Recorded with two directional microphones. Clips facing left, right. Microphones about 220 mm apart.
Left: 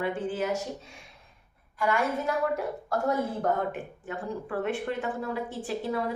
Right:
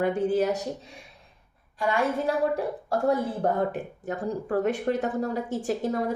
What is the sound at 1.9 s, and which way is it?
A woman's voice, 30° right (ahead or behind).